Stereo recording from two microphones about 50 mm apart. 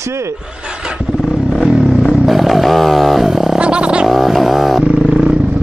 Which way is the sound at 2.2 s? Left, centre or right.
Centre.